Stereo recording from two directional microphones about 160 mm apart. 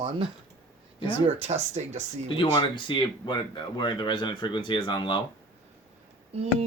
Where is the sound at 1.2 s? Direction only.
40° right (ahead or behind).